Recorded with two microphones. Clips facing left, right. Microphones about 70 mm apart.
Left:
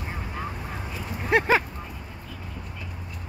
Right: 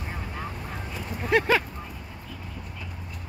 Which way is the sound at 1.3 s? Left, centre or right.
Centre.